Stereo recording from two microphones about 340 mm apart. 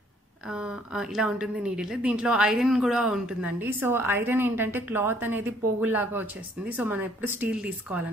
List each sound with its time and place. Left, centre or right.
0.5 s a woman's voice: centre